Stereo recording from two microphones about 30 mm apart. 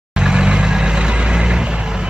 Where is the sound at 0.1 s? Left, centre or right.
Right.